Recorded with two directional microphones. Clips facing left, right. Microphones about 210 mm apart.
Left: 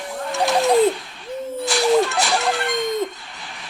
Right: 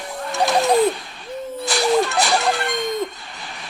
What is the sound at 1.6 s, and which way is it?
Speech, 40° right (ahead or behind).